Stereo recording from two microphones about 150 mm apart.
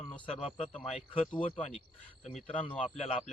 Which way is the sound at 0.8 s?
40° left (ahead or behind).